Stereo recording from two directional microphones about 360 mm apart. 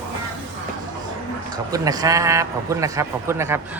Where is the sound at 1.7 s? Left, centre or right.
Centre.